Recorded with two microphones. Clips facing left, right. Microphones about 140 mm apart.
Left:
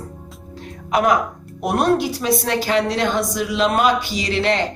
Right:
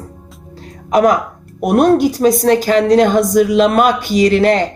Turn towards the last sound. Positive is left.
turn(degrees=-45)  # may be behind; listen again after turning